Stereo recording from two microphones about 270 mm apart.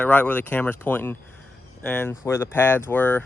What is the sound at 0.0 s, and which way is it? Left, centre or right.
Speech, centre.